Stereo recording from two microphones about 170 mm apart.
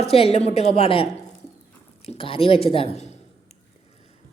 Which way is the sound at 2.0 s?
35° left (ahead or behind).